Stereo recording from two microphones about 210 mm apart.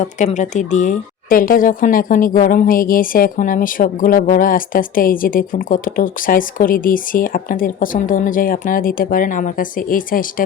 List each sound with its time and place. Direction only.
0.0 s speech: 35° left (ahead or behind)